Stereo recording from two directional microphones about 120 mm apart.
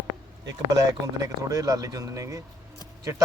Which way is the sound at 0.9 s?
30° right (ahead or behind).